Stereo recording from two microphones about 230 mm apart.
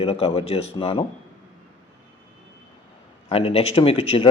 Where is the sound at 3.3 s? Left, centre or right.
Left.